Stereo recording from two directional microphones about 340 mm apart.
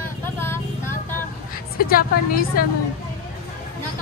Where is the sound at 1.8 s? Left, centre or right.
Left.